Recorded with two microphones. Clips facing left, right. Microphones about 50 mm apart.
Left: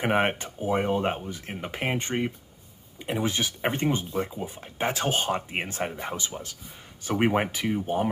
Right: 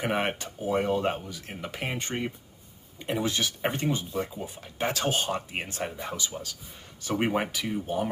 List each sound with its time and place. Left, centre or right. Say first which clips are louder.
0.0 s speech: left 4 dB; left
3.0 s speech: left 1 dB; centre
3.3 s speech: left 3 dB; left
7.1 s speech: left 3 dB; centre
7.5 s speech: left 3 dB; left